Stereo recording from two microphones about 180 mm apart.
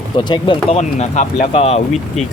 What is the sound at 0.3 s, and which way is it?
Speech, 25° left (ahead or behind).